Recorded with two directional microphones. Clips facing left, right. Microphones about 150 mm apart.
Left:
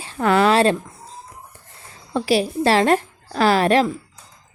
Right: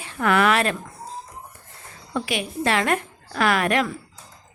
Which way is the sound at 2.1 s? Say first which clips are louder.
Left 8 dB; 30° left (ahead or behind).